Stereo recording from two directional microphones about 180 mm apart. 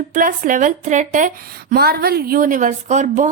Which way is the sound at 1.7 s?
60° right (ahead or behind).